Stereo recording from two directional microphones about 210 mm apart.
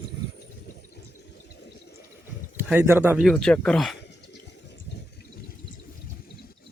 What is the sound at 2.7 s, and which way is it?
Speech, 10° right (ahead or behind).